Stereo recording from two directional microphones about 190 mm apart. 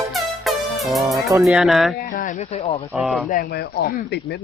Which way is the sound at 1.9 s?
50° left (ahead or behind).